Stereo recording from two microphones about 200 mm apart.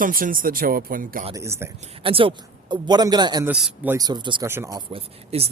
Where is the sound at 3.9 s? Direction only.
20° right (ahead or behind).